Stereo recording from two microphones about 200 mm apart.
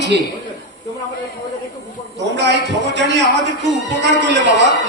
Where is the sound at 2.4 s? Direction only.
60° right (ahead or behind).